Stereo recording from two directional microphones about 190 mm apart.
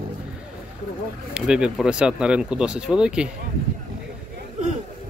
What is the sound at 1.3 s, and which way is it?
Speech, 5° right (ahead or behind).